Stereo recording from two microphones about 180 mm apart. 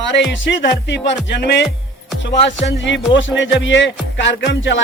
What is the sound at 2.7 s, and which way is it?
Music, 85° left.